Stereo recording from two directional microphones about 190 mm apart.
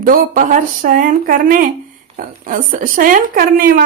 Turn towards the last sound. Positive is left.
turn(degrees=-45)  # may be behind; listen again after turning